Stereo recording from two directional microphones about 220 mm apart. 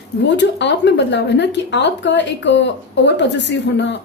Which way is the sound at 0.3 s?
55° left (ahead or behind).